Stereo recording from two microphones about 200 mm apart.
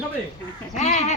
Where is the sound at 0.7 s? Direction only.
35° left (ahead or behind).